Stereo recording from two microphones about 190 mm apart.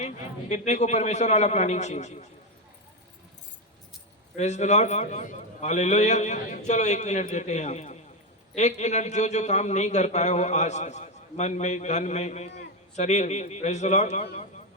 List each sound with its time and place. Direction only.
0.0 s a man's voice: 35° left (ahead or behind)
4.4 s a man's voice: 35° left (ahead or behind)